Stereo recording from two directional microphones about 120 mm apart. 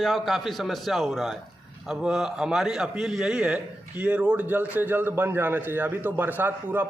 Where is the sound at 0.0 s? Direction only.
Centre (ahead or behind).